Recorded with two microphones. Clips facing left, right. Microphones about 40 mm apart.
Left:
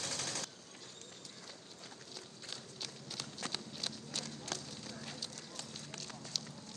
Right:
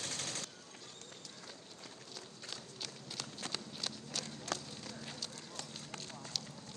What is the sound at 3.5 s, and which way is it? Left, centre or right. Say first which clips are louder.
Walk: even; centre.